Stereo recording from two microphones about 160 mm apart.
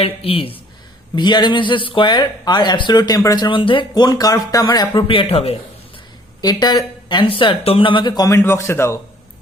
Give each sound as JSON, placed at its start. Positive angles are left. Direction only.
{"t": 0.0, "sound": "speech", "side_deg": 35}
{"t": 6.4, "sound": "speech", "side_deg": 25}